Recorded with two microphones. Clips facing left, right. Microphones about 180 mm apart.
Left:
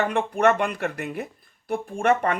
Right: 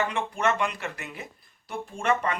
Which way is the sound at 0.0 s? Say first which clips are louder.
Left 6 dB; 60° left (ahead or behind).